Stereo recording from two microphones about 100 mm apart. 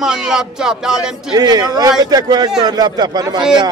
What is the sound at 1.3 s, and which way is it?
Speech, 45° right (ahead or behind).